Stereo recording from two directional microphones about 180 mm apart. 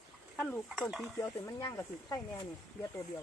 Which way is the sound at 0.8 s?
5° right (ahead or behind).